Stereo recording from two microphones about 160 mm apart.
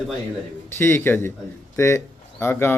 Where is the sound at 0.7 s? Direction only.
15° left (ahead or behind).